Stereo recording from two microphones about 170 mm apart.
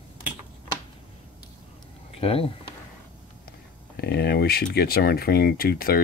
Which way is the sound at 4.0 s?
70° left (ahead or behind).